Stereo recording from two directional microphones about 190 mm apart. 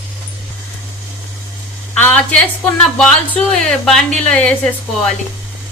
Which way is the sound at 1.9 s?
5° left (ahead or behind).